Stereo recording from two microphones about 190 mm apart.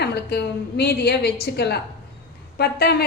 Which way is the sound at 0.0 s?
60° left (ahead or behind).